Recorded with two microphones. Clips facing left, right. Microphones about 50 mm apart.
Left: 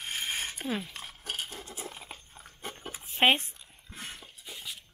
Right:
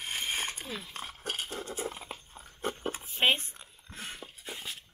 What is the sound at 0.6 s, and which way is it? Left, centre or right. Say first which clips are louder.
Speech: left 7 dB; left.